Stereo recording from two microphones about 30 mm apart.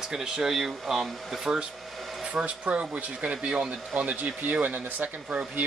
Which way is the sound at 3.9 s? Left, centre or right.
Right.